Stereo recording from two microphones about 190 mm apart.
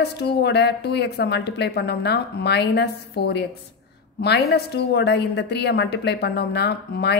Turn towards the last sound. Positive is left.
turn(degrees=60)  # may be behind; listen again after turning